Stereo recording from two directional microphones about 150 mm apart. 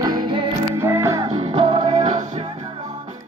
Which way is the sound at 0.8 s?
20° right (ahead or behind).